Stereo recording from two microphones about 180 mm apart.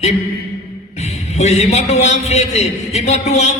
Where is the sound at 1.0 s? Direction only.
40° left (ahead or behind).